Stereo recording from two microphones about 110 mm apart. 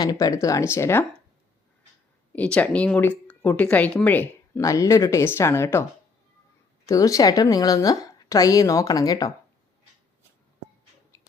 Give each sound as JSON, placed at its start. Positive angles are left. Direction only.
{"t": 0.0, "sound": "a woman's voice", "side_deg": 35}
{"t": 2.3, "sound": "speech", "side_deg": 15}
{"t": 4.6, "sound": "speech", "side_deg": 30}
{"t": 6.8, "sound": "a woman's voice", "side_deg": 30}